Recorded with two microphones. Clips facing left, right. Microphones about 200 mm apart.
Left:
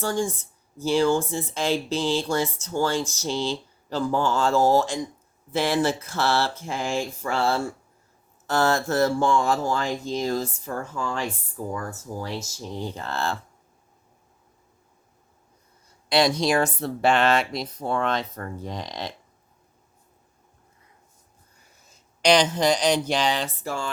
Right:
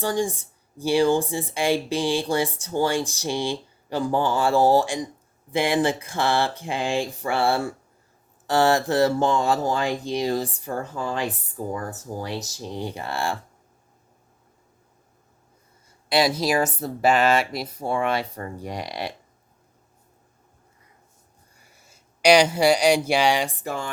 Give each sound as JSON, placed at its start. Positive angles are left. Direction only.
{"t": 0.0, "sound": "speech", "side_deg": -15}
{"t": 11.5, "sound": "speech", "side_deg": -30}
{"t": 11.9, "sound": "speech", "side_deg": -20}
{"t": 16.0, "sound": "speech", "side_deg": -5}
{"t": 21.6, "sound": "speech", "side_deg": -10}